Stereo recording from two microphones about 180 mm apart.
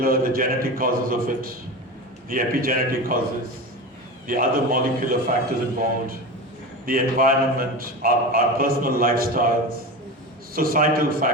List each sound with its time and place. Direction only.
0.0 s a man's voice: 55° right (ahead or behind)
4.3 s a man's voice: 50° right (ahead or behind)